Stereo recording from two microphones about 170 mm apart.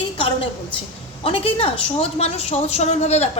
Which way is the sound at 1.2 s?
35° left (ahead or behind).